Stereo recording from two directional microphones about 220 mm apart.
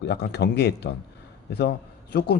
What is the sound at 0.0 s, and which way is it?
A man's voice, 50° left (ahead or behind).